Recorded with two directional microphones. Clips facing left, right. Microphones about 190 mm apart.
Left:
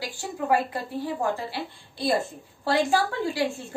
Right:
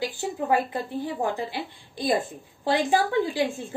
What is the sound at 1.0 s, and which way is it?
A woman's voice, 20° right (ahead or behind).